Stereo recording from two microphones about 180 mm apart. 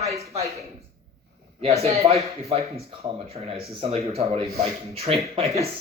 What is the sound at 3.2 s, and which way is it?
Speech, 35° right (ahead or behind).